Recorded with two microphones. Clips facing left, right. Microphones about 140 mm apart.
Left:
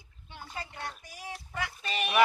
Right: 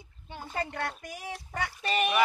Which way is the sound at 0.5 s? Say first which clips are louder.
Right 7 dB; 60° right (ahead or behind).